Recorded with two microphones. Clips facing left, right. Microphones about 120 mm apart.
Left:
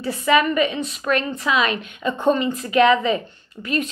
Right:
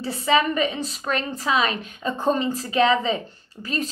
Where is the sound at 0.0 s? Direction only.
30° right (ahead or behind).